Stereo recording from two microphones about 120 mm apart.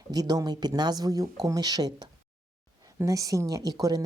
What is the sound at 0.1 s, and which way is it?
Speech, 30° right (ahead or behind).